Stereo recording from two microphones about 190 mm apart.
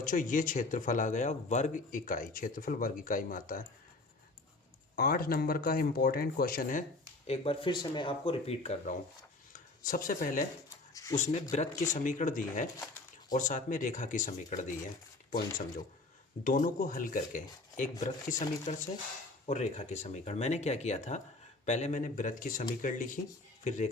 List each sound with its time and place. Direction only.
0.0 s speech: 45° left (ahead or behind)
4.9 s speech: 50° left (ahead or behind)
7.3 s speech: 30° left (ahead or behind)
9.5 s a sound: 45° left (ahead or behind)
10.9 s a sound: 15° left (ahead or behind)
11.2 s speech: 40° left (ahead or behind)